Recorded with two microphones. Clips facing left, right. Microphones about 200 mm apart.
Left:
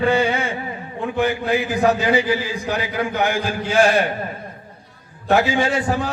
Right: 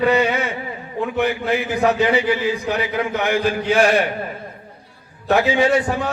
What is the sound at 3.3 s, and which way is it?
Speech, 60° right (ahead or behind).